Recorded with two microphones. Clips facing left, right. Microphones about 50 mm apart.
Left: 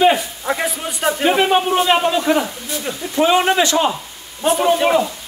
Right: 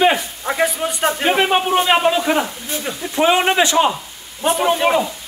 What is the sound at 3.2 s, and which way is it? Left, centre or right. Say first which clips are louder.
A man's voice: even; centre.